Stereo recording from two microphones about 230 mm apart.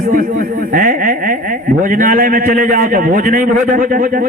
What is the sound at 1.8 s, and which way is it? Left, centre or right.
Music, right.